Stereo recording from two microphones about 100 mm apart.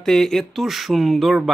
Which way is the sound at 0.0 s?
5° left (ahead or behind).